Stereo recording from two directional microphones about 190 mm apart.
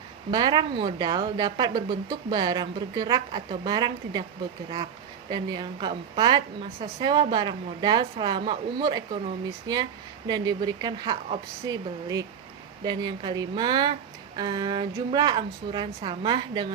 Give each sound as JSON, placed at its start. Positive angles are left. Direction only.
{"t": 0.3, "sound": "a woman's voice", "side_deg": -20}
{"t": 5.3, "sound": "a woman's voice", "side_deg": -25}